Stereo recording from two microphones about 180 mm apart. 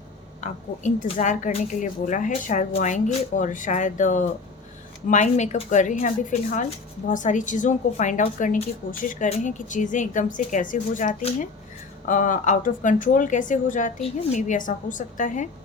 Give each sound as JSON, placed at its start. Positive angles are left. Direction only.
{"t": 0.4, "sound": "a woman's voice", "side_deg": 45}